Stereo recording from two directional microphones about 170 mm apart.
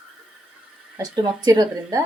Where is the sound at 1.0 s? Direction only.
25° right (ahead or behind).